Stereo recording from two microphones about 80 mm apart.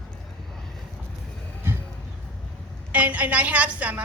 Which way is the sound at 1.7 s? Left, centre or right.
Right.